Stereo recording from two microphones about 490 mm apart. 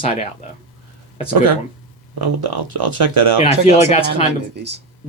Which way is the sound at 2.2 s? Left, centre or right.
Right.